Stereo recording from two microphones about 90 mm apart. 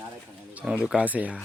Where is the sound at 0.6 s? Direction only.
10° right (ahead or behind).